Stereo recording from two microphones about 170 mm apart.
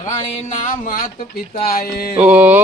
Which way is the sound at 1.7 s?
60° left (ahead or behind).